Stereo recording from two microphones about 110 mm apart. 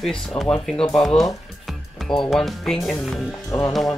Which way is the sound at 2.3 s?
5° left (ahead or behind).